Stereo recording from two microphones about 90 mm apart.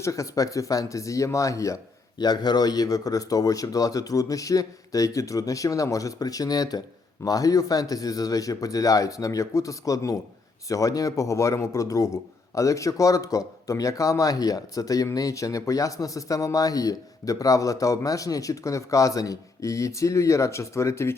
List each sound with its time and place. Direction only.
0.0 s speech: 35° left (ahead or behind)
2.1 s speech: 50° left (ahead or behind); by 21.2 s 30° left (ahead or behind)